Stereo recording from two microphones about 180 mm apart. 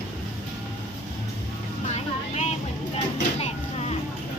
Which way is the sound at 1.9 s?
35° left (ahead or behind).